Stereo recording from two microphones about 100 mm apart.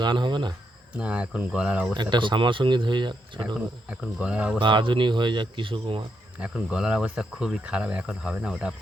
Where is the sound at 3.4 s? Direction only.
10° right (ahead or behind).